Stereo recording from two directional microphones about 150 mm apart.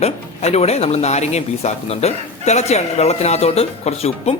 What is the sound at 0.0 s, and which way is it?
Speech, 45° left (ahead or behind).